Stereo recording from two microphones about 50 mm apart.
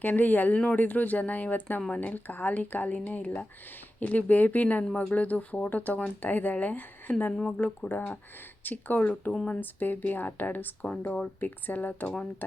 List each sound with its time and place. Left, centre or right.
0.0 s speech: left
10.8 s speech: centre
11.3 s speech: left